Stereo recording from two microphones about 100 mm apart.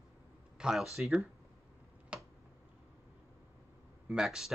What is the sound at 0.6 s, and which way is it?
Speech, 5° right (ahead or behind).